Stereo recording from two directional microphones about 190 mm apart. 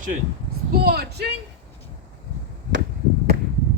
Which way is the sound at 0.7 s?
55° right (ahead or behind).